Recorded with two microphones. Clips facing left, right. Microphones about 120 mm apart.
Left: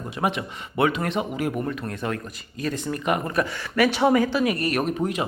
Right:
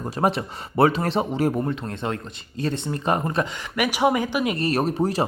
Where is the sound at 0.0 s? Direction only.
40° right (ahead or behind).